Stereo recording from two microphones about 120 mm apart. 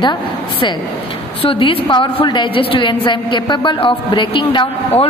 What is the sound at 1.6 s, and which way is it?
A woman's voice, 45° left (ahead or behind).